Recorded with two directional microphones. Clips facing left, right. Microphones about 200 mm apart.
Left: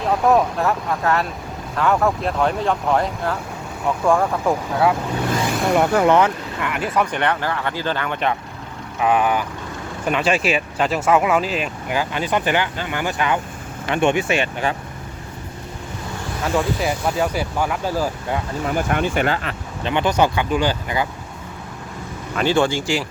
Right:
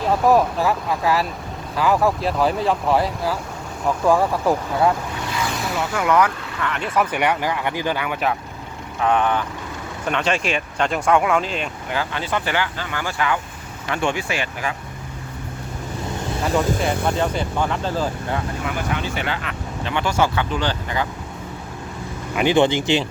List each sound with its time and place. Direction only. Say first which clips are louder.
0.0 s speech: even; centre (ahead or behind)
5.6 s speech: left 12 dB; 55° left (ahead or behind)
5.9 s speech: left 3 dB; 35° left (ahead or behind)
6.7 s speech: even; 5° left (ahead or behind)
9.0 s speech: left 1 dB; 5° left (ahead or behind); by 14.8 s 25° left (ahead or behind)
16.8 s speech: even; 5° left (ahead or behind)
18.6 s speech: left 4 dB; 45° left (ahead or behind)
19.8 s speech: left 3 dB; 20° left (ahead or behind)
22.4 s speech: right 2 dB; 15° right (ahead or behind)